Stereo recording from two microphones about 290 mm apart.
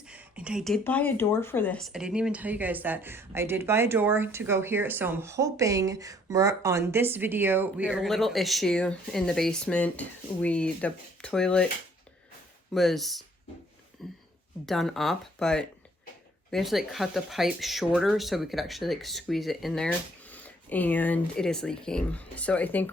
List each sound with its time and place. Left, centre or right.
0.0 s speech: centre
12.7 s speech: centre